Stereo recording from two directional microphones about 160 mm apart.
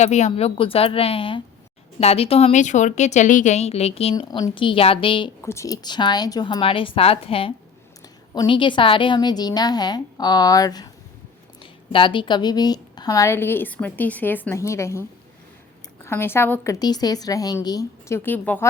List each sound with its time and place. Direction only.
0.0 s a woman's voice: 45° left (ahead or behind)
4.1 s a woman's voice: 25° left (ahead or behind)
5.4 s a woman's voice: 15° left (ahead or behind)
16.0 s a woman's voice: 15° left (ahead or behind)
16.8 s a woman's voice: 25° left (ahead or behind)